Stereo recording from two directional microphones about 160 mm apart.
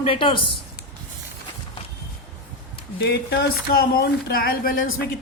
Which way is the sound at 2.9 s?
90° left.